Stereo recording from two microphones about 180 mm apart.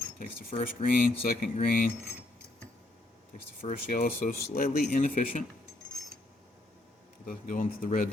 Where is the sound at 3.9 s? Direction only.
50° left (ahead or behind).